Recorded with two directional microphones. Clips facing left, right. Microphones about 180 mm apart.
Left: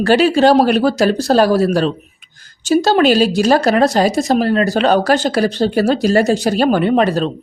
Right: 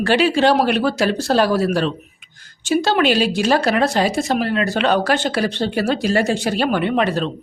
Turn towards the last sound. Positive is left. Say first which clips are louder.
# left 5 dB
turn(degrees=40)  # may be behind; listen again after turning